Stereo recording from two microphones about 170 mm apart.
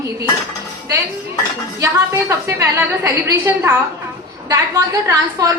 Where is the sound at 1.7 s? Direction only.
15° right (ahead or behind).